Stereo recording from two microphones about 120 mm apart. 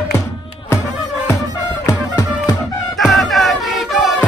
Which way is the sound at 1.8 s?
30° left (ahead or behind).